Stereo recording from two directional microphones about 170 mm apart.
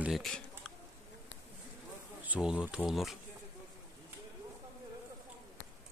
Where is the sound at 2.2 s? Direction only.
10° right (ahead or behind).